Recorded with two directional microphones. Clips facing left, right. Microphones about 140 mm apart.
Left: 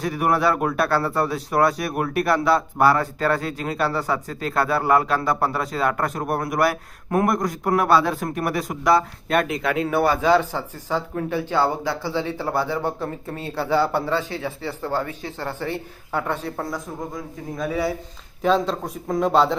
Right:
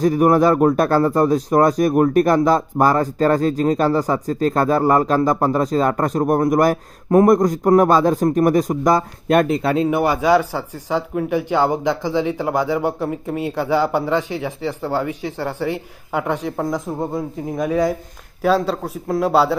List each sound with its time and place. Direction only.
0.0 s a man's voice: 40° right (ahead or behind)
9.8 s speech: 15° right (ahead or behind)